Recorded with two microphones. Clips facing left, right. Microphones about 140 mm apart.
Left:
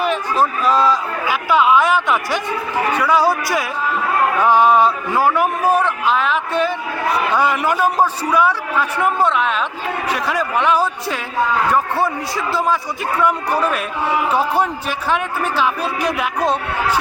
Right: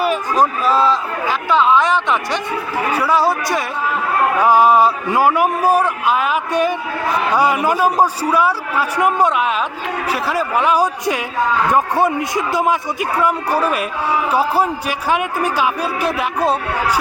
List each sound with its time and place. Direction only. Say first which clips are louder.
0.0 s a sound: right 2 dB; 10° right (ahead or behind)
0.7 s speech: left 1 dB; 5° right (ahead or behind)
1.3 s a man's voice: even; 10° left (ahead or behind); by 16.6 s 10° right (ahead or behind)